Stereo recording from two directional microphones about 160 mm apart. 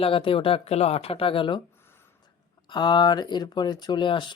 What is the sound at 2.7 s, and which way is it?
Speech, 30° left (ahead or behind).